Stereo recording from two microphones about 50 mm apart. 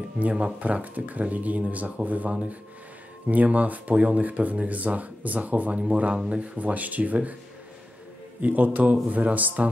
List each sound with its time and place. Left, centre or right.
0.2 s speech: right
8.4 s speech: right